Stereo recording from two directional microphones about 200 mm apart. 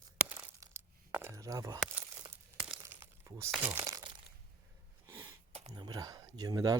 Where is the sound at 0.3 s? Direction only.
10° right (ahead or behind).